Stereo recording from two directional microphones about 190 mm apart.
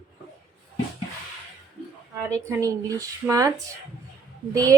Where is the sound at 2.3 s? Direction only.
15° right (ahead or behind).